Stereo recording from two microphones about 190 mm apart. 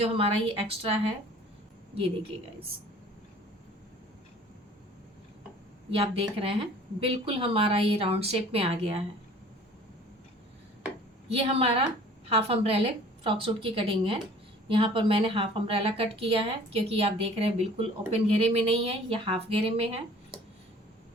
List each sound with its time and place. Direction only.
0.0 s a woman's voice: 30° right (ahead or behind)
5.9 s a woman's voice: 30° right (ahead or behind)
11.3 s a woman's voice: 30° right (ahead or behind)